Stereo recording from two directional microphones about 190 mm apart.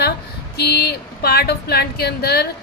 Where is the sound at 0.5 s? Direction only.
55° left (ahead or behind).